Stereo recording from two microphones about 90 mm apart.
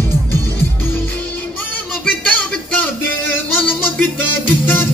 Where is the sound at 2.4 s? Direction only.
15° left (ahead or behind).